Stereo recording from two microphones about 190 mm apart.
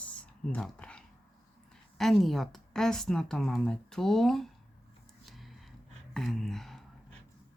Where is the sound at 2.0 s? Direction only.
Centre (ahead or behind).